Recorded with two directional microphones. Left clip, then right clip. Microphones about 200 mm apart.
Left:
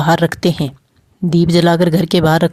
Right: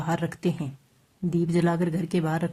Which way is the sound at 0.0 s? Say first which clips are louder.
Left 15 dB; 40° left (ahead or behind).